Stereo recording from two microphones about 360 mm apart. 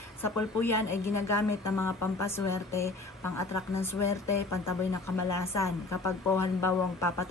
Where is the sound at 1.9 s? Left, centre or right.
Left.